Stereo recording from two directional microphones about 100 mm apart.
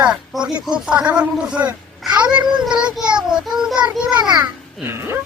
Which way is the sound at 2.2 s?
10° right (ahead or behind).